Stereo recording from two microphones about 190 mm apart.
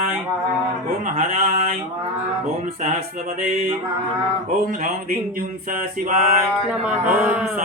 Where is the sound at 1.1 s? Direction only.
40° right (ahead or behind).